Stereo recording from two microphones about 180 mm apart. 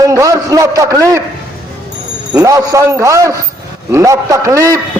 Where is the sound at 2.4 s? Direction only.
15° right (ahead or behind).